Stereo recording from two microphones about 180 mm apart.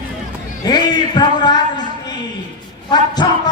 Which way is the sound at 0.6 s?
25° left (ahead or behind).